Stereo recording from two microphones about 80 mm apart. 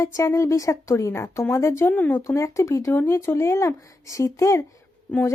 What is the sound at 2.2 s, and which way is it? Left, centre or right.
A woman's voice, left.